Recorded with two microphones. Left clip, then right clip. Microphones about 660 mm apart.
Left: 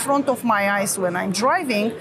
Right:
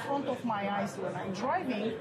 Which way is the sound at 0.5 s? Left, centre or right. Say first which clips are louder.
Left 14 dB; left.